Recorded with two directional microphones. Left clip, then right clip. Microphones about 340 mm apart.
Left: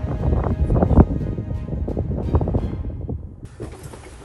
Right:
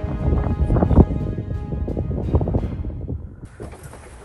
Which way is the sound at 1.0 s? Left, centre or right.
Centre.